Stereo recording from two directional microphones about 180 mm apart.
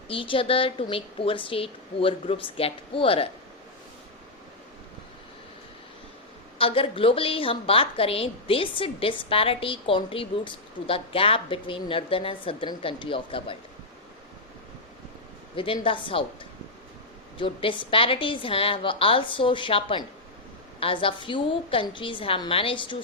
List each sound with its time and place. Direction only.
0.1 s a woman's voice: 30° left (ahead or behind)
6.6 s a woman's voice: 30° left (ahead or behind)
15.5 s a woman's voice: 30° left (ahead or behind)
17.3 s a woman's voice: 30° left (ahead or behind)